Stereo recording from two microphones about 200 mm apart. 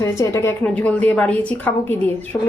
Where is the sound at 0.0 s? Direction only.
15° left (ahead or behind).